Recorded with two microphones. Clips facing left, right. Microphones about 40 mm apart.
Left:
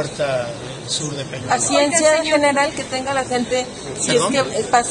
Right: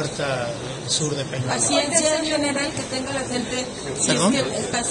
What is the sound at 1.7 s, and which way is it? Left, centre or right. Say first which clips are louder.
Speech: left 6 dB; left.